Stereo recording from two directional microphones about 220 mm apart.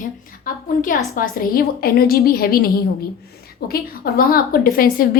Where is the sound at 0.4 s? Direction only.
40° left (ahead or behind).